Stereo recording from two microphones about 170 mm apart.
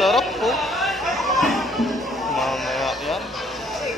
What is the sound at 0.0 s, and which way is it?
Music, centre (ahead or behind).